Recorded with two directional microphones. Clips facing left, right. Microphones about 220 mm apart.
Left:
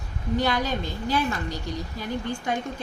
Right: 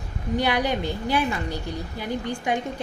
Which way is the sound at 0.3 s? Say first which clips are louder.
Right 2 dB; 15° right (ahead or behind).